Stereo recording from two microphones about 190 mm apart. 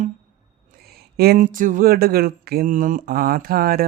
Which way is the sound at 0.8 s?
55° right (ahead or behind).